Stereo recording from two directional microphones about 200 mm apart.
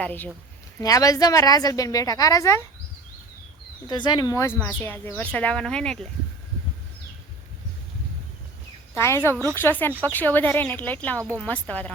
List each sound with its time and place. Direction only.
0.0 s a woman's voice: 10° left (ahead or behind)
3.8 s speech: 20° left (ahead or behind); by 6.1 s 5° left (ahead or behind)
9.0 s a woman's voice: 15° left (ahead or behind)
9.3 s speech: 15° right (ahead or behind)
9.6 s a woman's voice: 10° left (ahead or behind)